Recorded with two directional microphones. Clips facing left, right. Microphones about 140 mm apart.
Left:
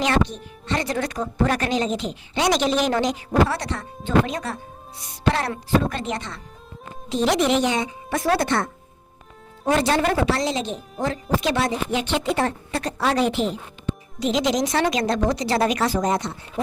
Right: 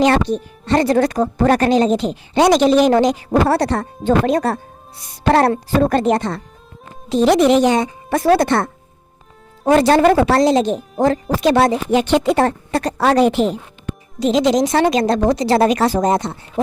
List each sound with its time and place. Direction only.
0.3 s speech: 40° right (ahead or behind)
8.4 s speech: 60° right (ahead or behind)
9.6 s speech: 45° right (ahead or behind)
11.5 s speech: 60° right (ahead or behind); by 13.5 s 45° right (ahead or behind)
14.2 s speech: 35° right (ahead or behind)